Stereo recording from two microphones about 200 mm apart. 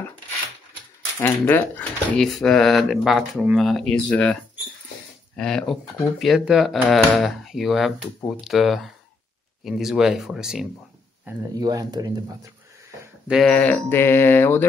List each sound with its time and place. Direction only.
1.2 s speech: 10° left (ahead or behind)
11.2 s speech: 20° right (ahead or behind)
13.3 s speech: 5° left (ahead or behind)